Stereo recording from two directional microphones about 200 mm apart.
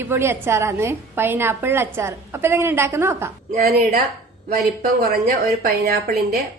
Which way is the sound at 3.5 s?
45° right (ahead or behind).